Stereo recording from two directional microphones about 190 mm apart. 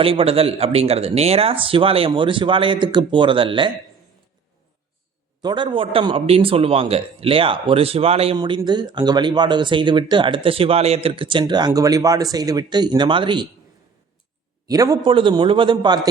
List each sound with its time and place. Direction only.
0.0 s a man's voice: 30° right (ahead or behind)
5.4 s a man's voice: 25° right (ahead or behind)
14.7 s a man's voice: 20° right (ahead or behind)